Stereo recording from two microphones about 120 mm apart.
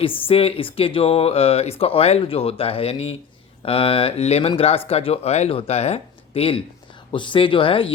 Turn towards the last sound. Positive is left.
turn(degrees=45)  # may be behind; listen again after turning